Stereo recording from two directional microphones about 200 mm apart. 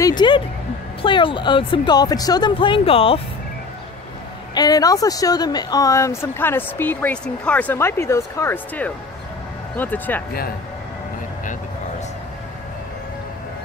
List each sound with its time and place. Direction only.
0.0 s a sound: 20° left (ahead or behind)
1.0 s speech: 25° left (ahead or behind)
4.6 s speech: 20° left (ahead or behind)